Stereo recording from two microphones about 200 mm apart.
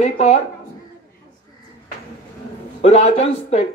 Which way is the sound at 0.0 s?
35° left (ahead or behind).